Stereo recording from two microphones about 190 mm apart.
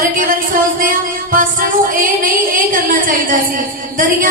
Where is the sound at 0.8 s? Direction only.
45° right (ahead or behind).